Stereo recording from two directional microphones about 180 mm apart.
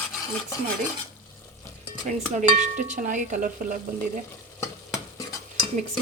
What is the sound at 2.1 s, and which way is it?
Speech, 45° right (ahead or behind).